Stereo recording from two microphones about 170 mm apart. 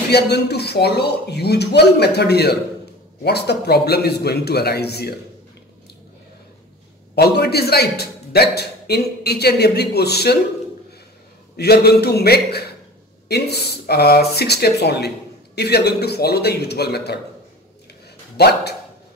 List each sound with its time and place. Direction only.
0.1 s speech: 75° left (ahead or behind)
7.2 s speech: 70° left (ahead or behind)
11.5 s speech: 70° left (ahead or behind)
18.3 s speech: 75° left (ahead or behind)